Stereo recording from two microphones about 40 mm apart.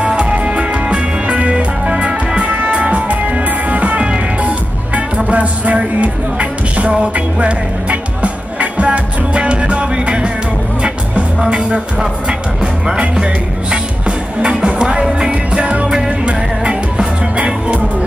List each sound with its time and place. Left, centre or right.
0.0 s music: right
13.1 s music: right
15.6 s music: right